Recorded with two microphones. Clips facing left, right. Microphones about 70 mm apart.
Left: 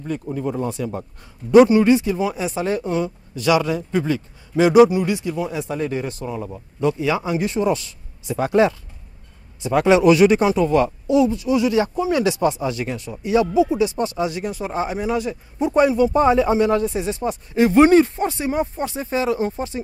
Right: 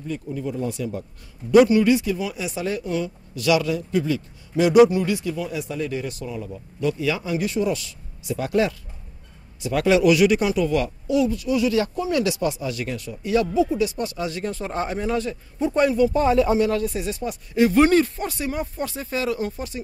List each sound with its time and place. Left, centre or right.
0.0 s speech: left
1.5 s speech: left